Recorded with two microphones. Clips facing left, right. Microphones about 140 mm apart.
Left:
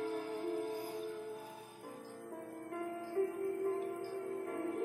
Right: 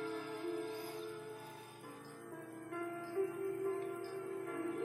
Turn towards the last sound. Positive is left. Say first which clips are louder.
# left 2 dB
turn(degrees=40)  # may be behind; listen again after turning